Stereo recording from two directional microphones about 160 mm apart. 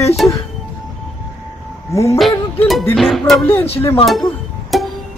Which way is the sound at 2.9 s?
Centre (ahead or behind).